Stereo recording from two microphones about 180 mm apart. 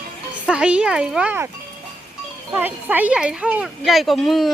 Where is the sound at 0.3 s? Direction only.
5° right (ahead or behind).